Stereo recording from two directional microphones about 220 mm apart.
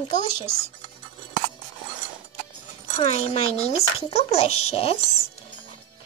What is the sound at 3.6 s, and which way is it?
Speech, 25° left (ahead or behind).